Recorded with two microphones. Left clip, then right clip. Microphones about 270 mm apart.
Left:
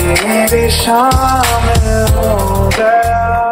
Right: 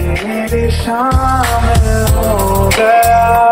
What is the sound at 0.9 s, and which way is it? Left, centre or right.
Music, centre.